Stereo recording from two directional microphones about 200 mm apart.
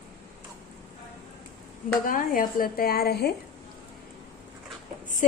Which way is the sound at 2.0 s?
45° left (ahead or behind).